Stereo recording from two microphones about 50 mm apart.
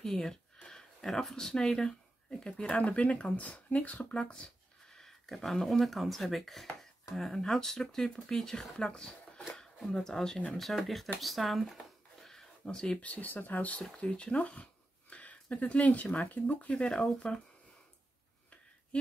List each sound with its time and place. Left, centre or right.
0.0 s speech: centre
4.9 s speech: centre
11.1 s a sound: centre
13.0 s speech: left
13.9 s a sound: left
15.5 s speech: left
16.9 s speech: centre